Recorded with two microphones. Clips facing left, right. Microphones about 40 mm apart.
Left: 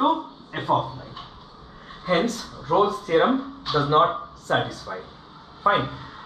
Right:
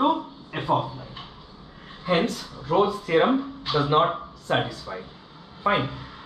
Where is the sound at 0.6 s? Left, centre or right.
Right.